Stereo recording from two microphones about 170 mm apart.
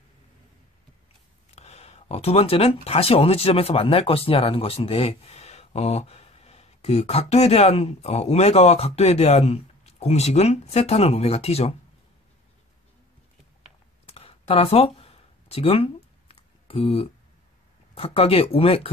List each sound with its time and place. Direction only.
1.5 s speech: 40° left (ahead or behind)
14.0 s a sound: 35° left (ahead or behind)
17.9 s speech: 35° left (ahead or behind)